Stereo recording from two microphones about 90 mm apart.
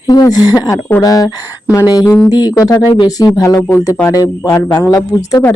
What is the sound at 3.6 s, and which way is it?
Speech, 25° left (ahead or behind).